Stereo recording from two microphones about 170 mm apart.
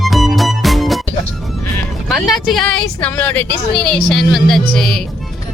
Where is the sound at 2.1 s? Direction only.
Centre (ahead or behind).